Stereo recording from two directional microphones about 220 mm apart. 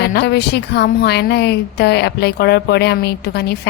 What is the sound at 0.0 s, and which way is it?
A woman's voice, 50° left (ahead or behind).